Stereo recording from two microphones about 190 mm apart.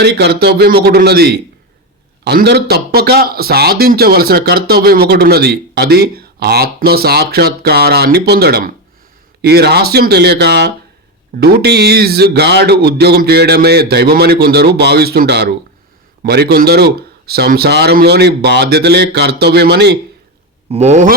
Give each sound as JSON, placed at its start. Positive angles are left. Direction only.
{"t": 0.0, "sound": "a man's voice", "side_deg": -60}
{"t": 20.7, "sound": "a man's voice", "side_deg": -35}